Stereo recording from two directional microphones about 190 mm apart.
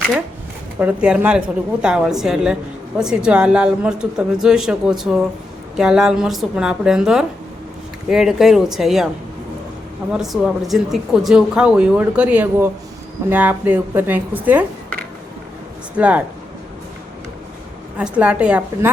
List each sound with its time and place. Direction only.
0.8 s speech: 5° right (ahead or behind)
10.1 s speech: centre (ahead or behind)
16.0 s speech: 5° right (ahead or behind)
17.9 s speech: 5° right (ahead or behind)